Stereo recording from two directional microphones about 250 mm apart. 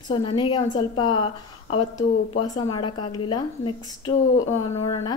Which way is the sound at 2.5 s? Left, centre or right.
Centre.